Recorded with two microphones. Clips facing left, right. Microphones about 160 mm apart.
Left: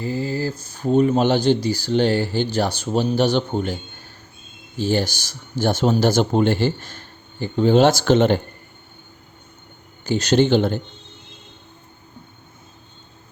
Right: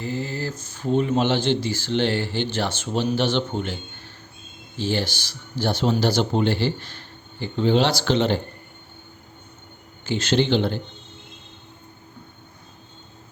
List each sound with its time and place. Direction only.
0.0 s speech: 40° left (ahead or behind)
4.8 s speech: 45° left (ahead or behind)
10.1 s speech: 40° left (ahead or behind)